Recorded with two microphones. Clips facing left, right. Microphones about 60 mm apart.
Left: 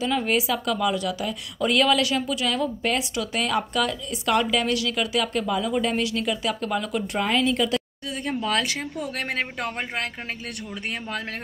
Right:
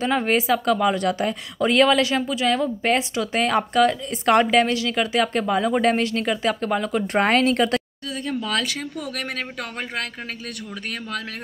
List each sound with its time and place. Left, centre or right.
0.0 s a woman's voice: right
1.6 s a woman's voice: right
7.2 s a woman's voice: right
8.3 s speech: left